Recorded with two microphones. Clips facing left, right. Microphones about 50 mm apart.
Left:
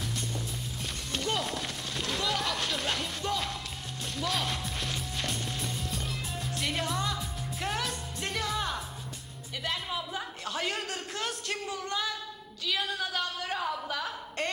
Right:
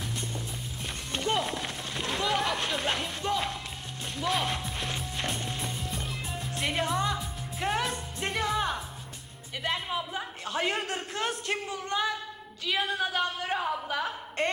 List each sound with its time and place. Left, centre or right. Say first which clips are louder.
1.1 s music: right 3 dB; right
1.4 s run: right 2 dB; centre
3.2 s music: right 3 dB; centre
4.2 s speech: right 3 dB; centre
5.2 s music: right 2 dB; right
5.8 s music: even; centre
10.1 s a sound: right 1 dB; centre
12.6 s a woman's voice: right 3 dB; right